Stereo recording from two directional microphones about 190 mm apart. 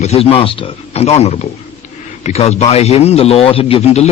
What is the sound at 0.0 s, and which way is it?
Speech, 30° left (ahead or behind).